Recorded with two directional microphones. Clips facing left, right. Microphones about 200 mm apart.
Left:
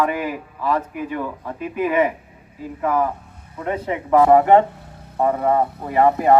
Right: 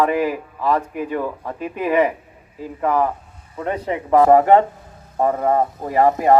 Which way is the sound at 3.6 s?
35° right (ahead or behind).